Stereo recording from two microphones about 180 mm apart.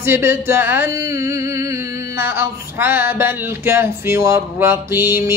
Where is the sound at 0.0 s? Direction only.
15° right (ahead or behind).